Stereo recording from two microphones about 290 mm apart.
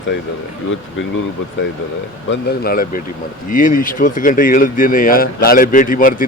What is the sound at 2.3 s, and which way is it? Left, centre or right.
Speech, left.